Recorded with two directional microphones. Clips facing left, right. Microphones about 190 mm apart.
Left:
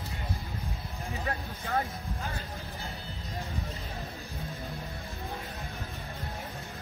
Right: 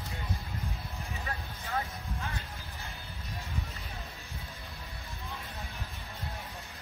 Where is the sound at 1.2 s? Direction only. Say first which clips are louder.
Left 6 dB; 40° left (ahead or behind).